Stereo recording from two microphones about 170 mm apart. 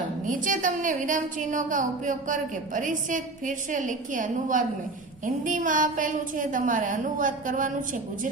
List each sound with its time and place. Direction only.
0.4 s a woman's voice: 50° right (ahead or behind)